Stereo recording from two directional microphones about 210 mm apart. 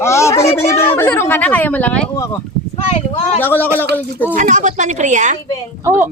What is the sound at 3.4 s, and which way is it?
Speech, 10° left (ahead or behind).